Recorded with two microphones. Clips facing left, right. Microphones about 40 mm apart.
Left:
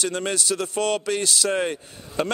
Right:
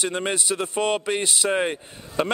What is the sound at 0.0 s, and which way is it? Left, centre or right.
Speech, right.